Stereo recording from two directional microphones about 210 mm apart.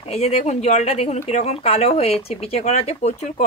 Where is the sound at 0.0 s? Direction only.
30° left (ahead or behind).